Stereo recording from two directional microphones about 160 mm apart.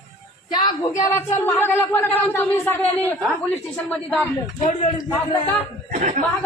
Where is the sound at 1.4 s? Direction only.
15° left (ahead or behind).